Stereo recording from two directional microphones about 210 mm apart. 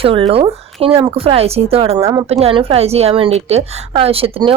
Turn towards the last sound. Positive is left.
turn(degrees=-25)  # may be behind; listen again after turning